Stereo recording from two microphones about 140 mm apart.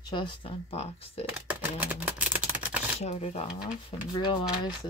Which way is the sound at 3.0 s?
50° left (ahead or behind).